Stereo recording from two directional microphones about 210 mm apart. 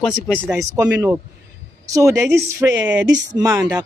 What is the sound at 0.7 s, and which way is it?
A woman's voice, 15° right (ahead or behind).